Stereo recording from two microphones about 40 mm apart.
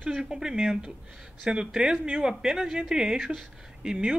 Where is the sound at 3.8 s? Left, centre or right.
Right.